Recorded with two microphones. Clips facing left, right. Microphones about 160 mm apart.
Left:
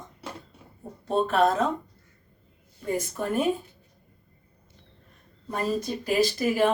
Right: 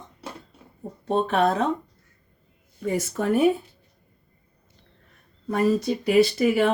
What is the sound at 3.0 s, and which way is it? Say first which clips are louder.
Speech: right 6 dB; 70° right (ahead or behind).